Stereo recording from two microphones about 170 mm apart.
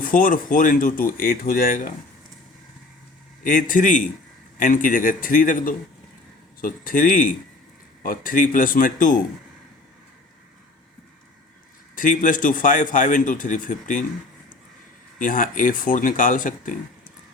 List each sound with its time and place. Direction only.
0.0 s a man's voice: 50° left (ahead or behind)
3.4 s a man's voice: 50° left (ahead or behind)
11.9 s a man's voice: 50° left (ahead or behind)
15.2 s a man's voice: 50° left (ahead or behind)